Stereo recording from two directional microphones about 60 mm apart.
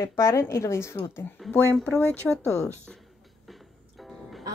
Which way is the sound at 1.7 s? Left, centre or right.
Centre.